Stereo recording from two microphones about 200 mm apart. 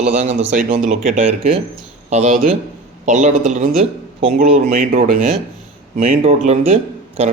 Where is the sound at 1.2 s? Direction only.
30° right (ahead or behind).